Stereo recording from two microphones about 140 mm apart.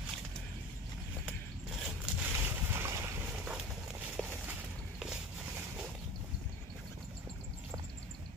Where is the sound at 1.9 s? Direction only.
15° right (ahead or behind).